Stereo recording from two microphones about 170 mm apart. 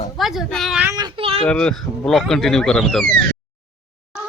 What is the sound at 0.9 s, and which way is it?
Speech, 25° right (ahead or behind).